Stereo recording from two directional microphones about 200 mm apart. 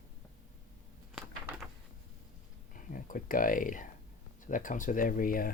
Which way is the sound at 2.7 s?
45° left (ahead or behind).